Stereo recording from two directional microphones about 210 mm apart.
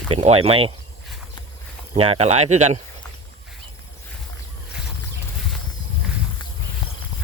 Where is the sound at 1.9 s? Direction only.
30° right (ahead or behind).